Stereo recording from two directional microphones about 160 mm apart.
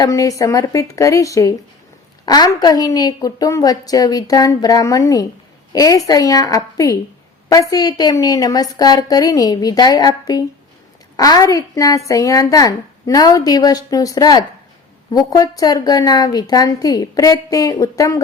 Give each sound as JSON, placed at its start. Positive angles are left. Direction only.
{"t": 0.0, "sound": "speech", "side_deg": 20}